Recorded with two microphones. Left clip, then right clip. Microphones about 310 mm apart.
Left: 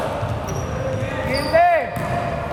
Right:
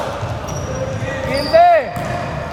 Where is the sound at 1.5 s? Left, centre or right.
Right.